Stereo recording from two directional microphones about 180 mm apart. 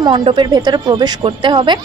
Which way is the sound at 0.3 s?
25° right (ahead or behind).